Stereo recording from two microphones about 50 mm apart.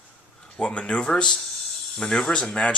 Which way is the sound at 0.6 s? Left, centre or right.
Centre.